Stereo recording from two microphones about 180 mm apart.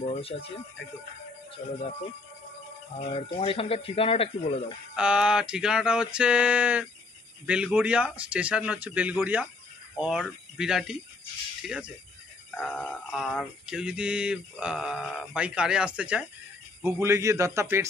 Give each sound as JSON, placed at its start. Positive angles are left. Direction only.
{"t": 0.0, "sound": "speech", "side_deg": 35}
{"t": 1.6, "sound": "speech", "side_deg": 30}
{"t": 3.3, "sound": "speech", "side_deg": 30}
{"t": 4.9, "sound": "music", "side_deg": -5}
{"t": 7.4, "sound": "speech", "side_deg": -5}
{"t": 9.9, "sound": "music", "side_deg": -5}
{"t": 11.6, "sound": "mechanisms", "side_deg": -5}
{"t": 12.4, "sound": "music", "side_deg": 10}
{"t": 16.0, "sound": "speech", "side_deg": -5}